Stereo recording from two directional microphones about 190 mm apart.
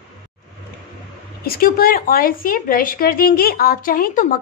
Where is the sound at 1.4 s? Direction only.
50° left (ahead or behind).